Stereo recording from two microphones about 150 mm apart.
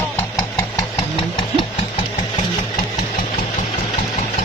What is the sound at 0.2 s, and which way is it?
Engine, 20° left (ahead or behind).